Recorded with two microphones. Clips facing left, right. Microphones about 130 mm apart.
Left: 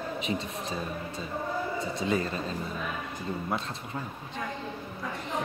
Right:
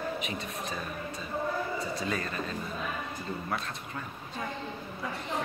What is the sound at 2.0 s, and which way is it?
Speech, 25° left (ahead or behind).